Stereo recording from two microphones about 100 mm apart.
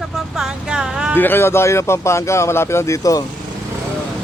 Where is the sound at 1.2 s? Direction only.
20° left (ahead or behind).